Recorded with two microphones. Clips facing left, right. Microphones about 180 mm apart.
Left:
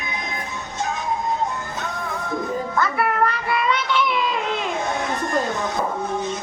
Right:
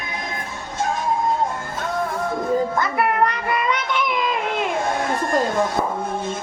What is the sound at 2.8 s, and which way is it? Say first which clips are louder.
Music: right 1 dB; 15° right (ahead or behind).